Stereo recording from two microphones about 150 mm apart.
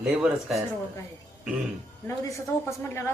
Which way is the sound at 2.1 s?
20° left (ahead or behind).